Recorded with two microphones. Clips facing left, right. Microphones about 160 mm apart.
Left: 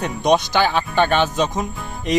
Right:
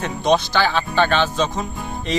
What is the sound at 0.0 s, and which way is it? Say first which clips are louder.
A man's voice: left 1 dB; 15° left (ahead or behind).